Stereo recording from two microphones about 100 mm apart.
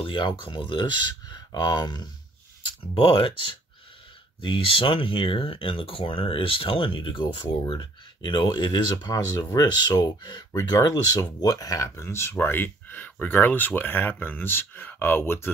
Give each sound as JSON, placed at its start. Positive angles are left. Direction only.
{"t": 0.0, "sound": "speech", "side_deg": 55}
{"t": 2.6, "sound": "speech", "side_deg": 60}
{"t": 11.9, "sound": "speech", "side_deg": 25}